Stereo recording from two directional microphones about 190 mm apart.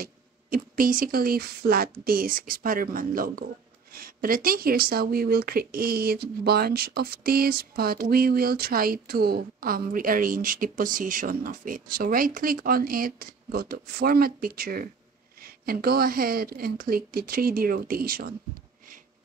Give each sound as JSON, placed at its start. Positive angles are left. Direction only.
{"t": 0.0, "sound": "speech", "side_deg": -50}